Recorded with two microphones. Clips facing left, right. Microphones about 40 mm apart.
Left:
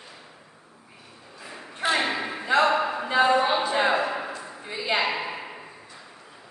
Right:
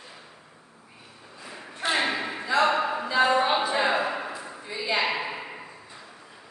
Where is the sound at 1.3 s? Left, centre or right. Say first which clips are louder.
Left 3 dB; centre.